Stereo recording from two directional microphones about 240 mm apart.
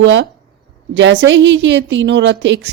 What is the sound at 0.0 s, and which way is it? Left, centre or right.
Speech, right.